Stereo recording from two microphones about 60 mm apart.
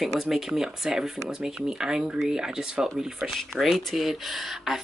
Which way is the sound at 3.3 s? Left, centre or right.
Centre.